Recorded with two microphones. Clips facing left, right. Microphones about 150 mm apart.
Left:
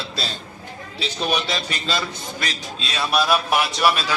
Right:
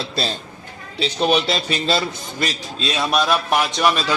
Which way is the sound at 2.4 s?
Centre (ahead or behind).